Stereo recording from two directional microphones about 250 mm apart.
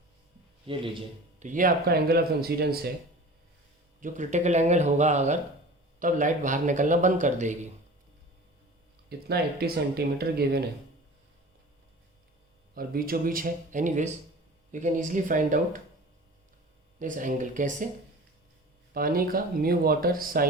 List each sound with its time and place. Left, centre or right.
0.7 s speech: right
4.0 s speech: right
9.0 s speech: right
12.7 s speech: right
17.0 s speech: right
18.9 s speech: right